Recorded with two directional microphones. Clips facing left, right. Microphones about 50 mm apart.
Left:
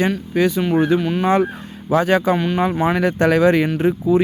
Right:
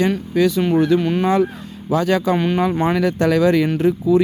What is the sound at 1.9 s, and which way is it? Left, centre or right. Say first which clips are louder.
Speech: left 2 dB; left.